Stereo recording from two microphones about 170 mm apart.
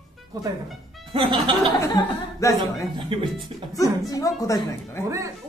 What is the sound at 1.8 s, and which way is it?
Speech, 20° left (ahead or behind).